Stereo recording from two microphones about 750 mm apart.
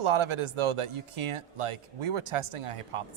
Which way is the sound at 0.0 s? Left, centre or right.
Right.